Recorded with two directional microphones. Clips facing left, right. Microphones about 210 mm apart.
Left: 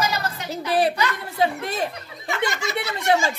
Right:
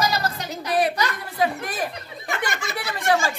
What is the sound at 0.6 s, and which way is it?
Speech, 30° left (ahead or behind).